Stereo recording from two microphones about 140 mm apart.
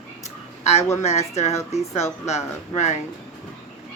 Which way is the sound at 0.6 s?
50° left (ahead or behind).